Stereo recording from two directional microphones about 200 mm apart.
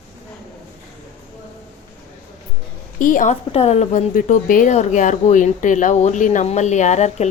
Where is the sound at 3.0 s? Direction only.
40° left (ahead or behind).